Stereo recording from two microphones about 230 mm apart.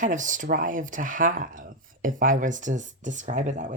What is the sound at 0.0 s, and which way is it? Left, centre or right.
Speech, right.